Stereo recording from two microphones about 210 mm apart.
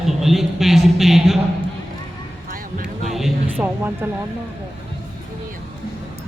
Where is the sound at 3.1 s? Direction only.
Centre (ahead or behind).